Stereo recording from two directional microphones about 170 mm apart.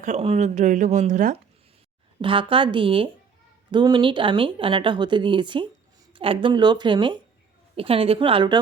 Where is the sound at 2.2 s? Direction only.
30° right (ahead or behind).